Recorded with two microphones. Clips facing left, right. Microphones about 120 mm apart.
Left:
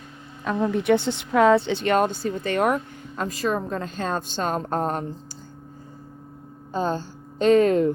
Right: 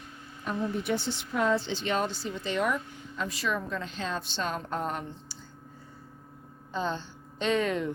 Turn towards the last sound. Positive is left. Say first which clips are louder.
# left 10 dB
turn(degrees=40)  # may be behind; listen again after turning